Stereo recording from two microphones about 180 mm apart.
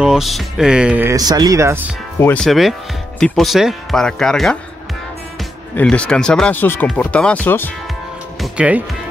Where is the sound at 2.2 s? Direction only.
10° left (ahead or behind).